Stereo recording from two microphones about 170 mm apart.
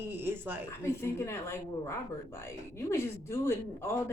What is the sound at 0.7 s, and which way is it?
Speech, 15° left (ahead or behind).